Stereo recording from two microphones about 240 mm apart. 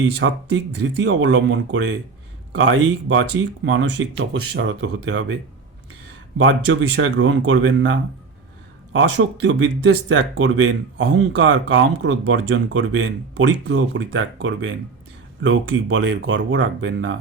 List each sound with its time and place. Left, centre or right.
0.0 s speech: right
6.4 s speech: right